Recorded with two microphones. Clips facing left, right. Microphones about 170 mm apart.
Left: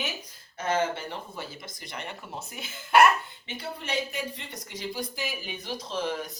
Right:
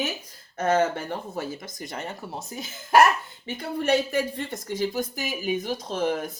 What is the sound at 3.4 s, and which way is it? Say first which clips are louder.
Speech: right 11 dB; 50° right (ahead or behind).